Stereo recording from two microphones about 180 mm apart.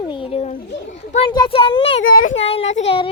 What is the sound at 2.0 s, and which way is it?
Speech, 50° left (ahead or behind).